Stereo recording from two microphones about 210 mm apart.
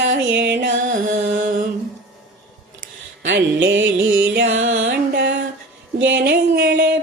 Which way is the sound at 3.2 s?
60° right (ahead or behind).